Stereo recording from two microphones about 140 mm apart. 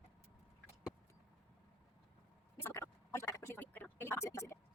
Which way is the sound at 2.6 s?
20° left (ahead or behind).